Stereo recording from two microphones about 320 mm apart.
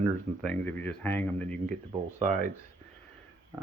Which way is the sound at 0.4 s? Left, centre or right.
Centre.